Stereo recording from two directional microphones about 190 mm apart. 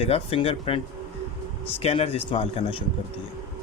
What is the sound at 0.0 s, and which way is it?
Speech, 30° left (ahead or behind).